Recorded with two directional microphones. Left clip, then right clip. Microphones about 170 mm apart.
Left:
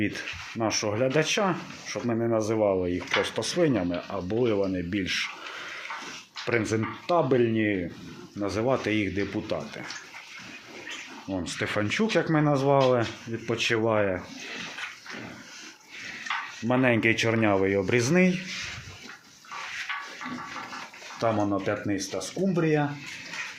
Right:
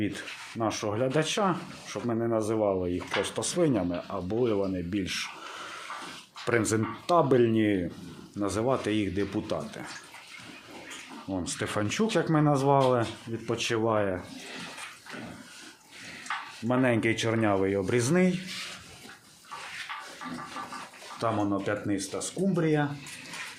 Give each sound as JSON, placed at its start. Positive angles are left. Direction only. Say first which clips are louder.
{"t": 0.6, "sound": "speech", "louder": "left 3 dB", "side_deg": 10}
{"t": 6.4, "sound": "speech", "louder": "even", "side_deg": -10}
{"t": 8.4, "sound": "speech", "louder": "left 2 dB", "side_deg": 0}
{"t": 11.3, "sound": "speech", "louder": "left 2 dB", "side_deg": 5}
{"t": 16.6, "sound": "speech", "louder": "left 3 dB", "side_deg": 10}
{"t": 21.2, "sound": "speech", "louder": "left 3 dB", "side_deg": 25}